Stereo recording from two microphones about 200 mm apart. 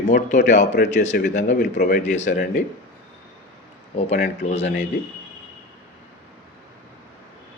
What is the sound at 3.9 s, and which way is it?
Speech, 30° left (ahead or behind).